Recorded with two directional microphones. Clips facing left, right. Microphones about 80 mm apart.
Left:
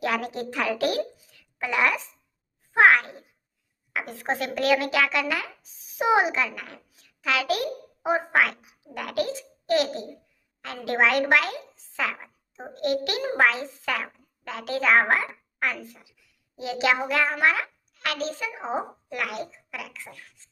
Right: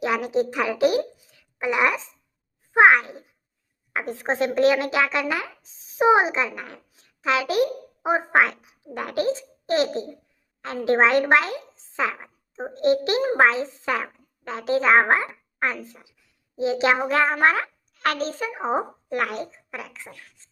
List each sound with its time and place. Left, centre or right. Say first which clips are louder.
0.0 s a woman's voice: right 5 dB; centre